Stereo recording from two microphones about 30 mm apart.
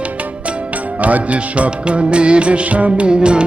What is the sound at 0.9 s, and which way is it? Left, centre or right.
Music, right.